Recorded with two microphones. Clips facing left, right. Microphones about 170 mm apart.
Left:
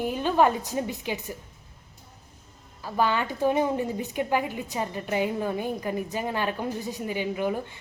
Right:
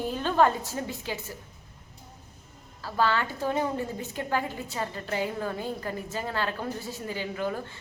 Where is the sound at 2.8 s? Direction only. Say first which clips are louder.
Left 1 dB; 15° left (ahead or behind).